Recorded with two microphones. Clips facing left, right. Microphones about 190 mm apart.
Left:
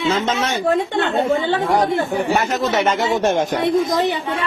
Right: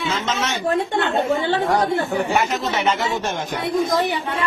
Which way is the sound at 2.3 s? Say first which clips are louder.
Left 3 dB; 40° left (ahead or behind).